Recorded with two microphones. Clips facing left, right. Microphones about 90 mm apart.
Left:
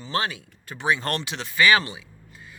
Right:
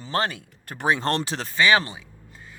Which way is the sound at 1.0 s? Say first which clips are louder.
Right 4 dB; 30° right (ahead or behind).